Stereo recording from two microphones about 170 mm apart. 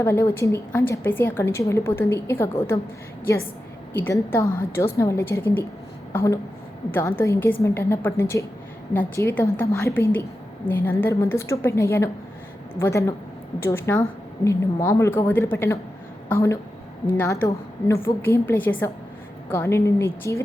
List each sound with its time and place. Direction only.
0.0 s a woman's voice: 15° left (ahead or behind)
3.9 s a woman's voice: 10° left (ahead or behind)
6.1 s a sound: 20° left (ahead or behind)
7.2 s a woman's voice: 15° left (ahead or behind)